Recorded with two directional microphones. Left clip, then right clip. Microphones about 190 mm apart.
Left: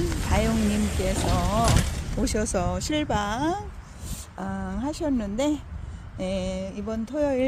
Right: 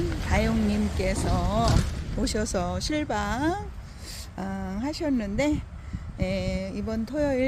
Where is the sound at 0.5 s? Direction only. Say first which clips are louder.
Left 1 dB; 60° left (ahead or behind).